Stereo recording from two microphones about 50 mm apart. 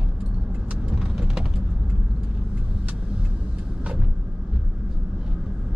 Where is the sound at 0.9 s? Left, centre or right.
Centre.